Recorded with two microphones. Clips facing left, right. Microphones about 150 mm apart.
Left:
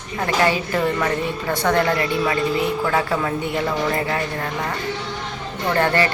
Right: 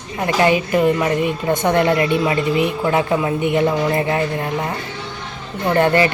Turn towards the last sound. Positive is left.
turn(degrees=-20)  # may be behind; listen again after turning